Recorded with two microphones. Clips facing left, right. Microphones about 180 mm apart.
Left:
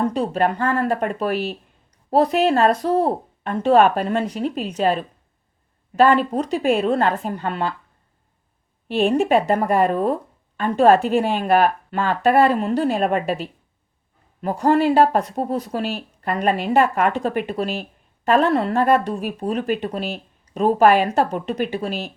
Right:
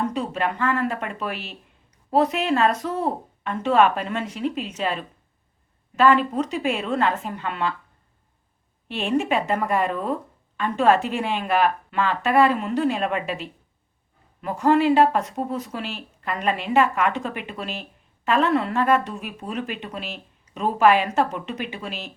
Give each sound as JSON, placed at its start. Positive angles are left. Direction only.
{"t": 0.0, "sound": "speech", "side_deg": 35}
{"t": 8.9, "sound": "speech", "side_deg": 40}